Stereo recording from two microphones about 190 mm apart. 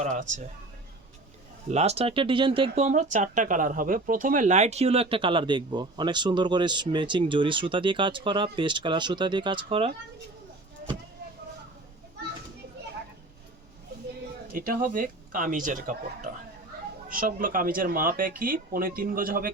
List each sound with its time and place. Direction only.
0.0 s speech: 40° right (ahead or behind)
1.6 s speech: 35° right (ahead or behind)
14.4 s speech: 45° right (ahead or behind)